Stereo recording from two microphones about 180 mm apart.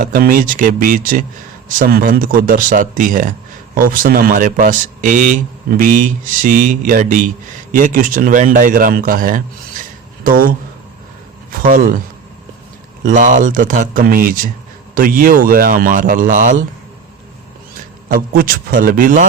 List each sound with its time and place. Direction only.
0.0 s a man's voice: 55° right (ahead or behind)
11.5 s a man's voice: 50° right (ahead or behind)
18.1 s a man's voice: 55° right (ahead or behind)